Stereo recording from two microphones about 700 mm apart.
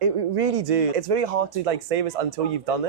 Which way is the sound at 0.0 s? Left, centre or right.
Right.